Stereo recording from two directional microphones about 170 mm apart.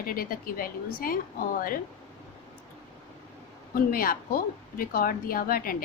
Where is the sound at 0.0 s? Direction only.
60° left (ahead or behind).